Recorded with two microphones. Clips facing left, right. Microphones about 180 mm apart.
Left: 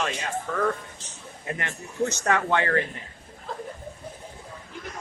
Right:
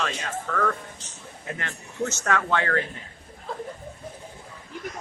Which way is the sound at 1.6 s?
15° left (ahead or behind).